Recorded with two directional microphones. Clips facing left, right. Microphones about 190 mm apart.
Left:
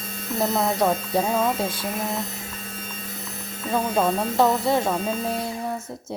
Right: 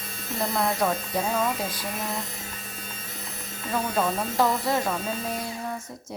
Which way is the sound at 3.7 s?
25° left (ahead or behind).